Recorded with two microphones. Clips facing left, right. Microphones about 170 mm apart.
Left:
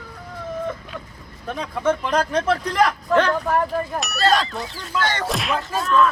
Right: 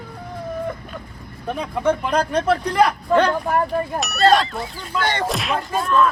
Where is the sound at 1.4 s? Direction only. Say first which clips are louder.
Right 1 dB; 10° right (ahead or behind).